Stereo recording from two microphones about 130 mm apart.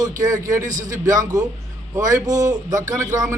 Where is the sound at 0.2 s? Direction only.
25° right (ahead or behind).